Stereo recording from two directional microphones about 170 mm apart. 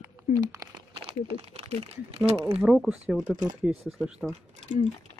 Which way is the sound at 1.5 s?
35° right (ahead or behind).